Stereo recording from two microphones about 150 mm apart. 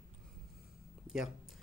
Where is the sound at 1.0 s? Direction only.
5° right (ahead or behind).